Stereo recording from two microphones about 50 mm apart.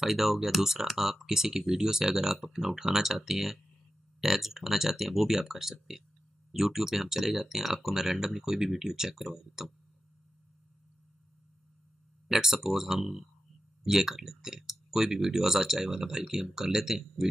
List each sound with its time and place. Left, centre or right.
0.0 s speech: centre
12.3 s speech: centre